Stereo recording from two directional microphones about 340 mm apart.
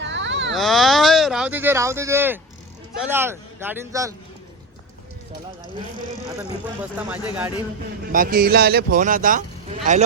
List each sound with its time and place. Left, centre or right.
0.0 s a sound: right
0.5 s speech: centre
6.9 s speech: centre
8.1 s speech: right